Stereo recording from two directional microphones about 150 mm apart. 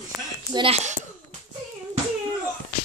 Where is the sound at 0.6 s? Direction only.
45° right (ahead or behind).